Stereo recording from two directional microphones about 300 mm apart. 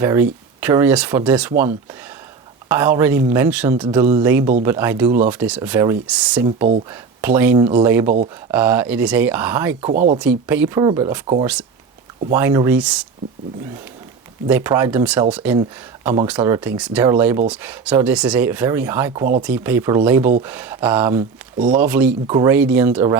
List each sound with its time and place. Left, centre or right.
0.0 s speech: centre
9.9 s speech: right
10.2 s speech: centre
14.4 s speech: centre